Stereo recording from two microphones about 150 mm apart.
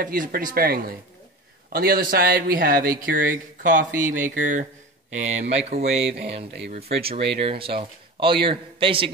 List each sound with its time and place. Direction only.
0.0 s speech: 65° right (ahead or behind); by 6.0 s 45° right (ahead or behind)
7.1 s a man's voice: 40° right (ahead or behind)